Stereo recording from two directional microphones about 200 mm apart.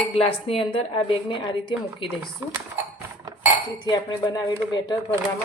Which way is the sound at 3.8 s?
20° left (ahead or behind).